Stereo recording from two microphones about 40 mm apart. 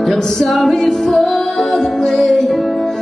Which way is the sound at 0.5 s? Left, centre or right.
Centre.